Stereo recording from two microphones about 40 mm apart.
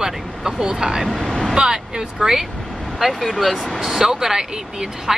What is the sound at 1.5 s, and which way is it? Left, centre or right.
Speech, right.